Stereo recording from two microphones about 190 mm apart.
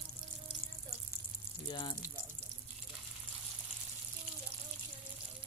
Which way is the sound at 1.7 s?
25° left (ahead or behind).